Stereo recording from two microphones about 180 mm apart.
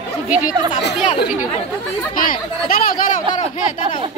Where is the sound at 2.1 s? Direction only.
50° left (ahead or behind).